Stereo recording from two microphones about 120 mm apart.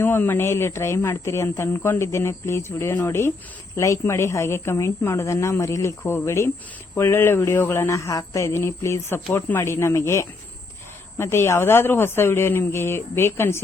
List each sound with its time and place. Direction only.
0.0 s speech: 15° left (ahead or behind)